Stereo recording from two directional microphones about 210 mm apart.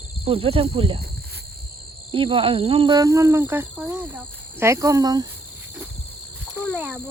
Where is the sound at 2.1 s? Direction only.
25° right (ahead or behind).